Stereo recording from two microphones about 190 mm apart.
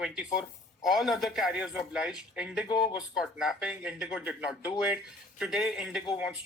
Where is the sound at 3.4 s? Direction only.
5° right (ahead or behind).